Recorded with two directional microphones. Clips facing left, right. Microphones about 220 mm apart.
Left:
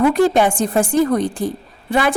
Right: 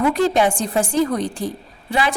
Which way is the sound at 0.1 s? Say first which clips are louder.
Left 3 dB; 50° left (ahead or behind).